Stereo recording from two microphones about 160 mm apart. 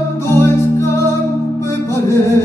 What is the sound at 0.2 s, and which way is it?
Music, 15° left (ahead or behind).